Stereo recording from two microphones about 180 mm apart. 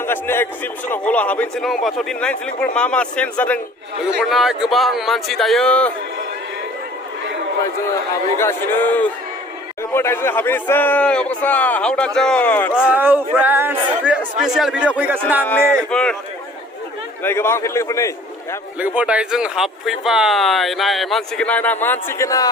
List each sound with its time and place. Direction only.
0.0 s a man's voice: 10° left (ahead or behind)
8.4 s a man's voice: 10° left (ahead or behind)
12.9 s speech: 10° right (ahead or behind)
15.4 s speech: 5° left (ahead or behind)
17.2 s a man's voice: 15° left (ahead or behind)
18.8 s speech: 5° right (ahead or behind); by 22.4 s 20° left (ahead or behind)